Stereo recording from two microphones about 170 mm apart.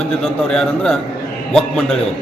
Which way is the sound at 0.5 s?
5° left (ahead or behind).